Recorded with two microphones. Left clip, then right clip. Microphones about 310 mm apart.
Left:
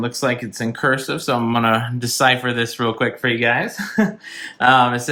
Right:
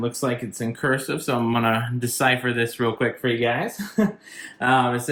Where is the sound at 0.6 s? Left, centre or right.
Centre.